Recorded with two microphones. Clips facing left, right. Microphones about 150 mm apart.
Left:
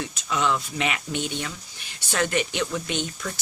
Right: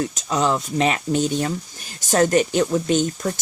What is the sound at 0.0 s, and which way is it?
Speech, 40° right (ahead or behind).